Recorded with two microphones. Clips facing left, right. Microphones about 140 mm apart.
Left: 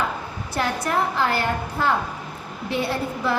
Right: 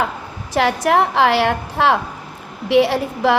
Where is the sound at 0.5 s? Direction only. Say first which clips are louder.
Right 8 dB; 85° right.